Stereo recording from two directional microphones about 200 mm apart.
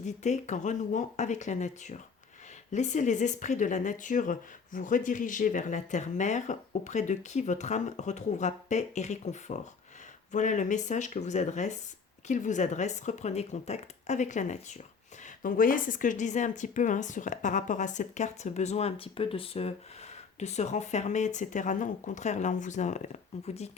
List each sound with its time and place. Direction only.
0.0 s speech: 35° left (ahead or behind)